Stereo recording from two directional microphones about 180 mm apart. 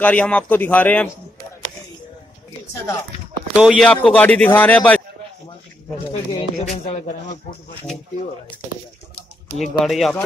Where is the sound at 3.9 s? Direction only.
10° left (ahead or behind).